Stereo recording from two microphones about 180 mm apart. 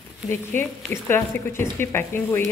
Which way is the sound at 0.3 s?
10° left (ahead or behind).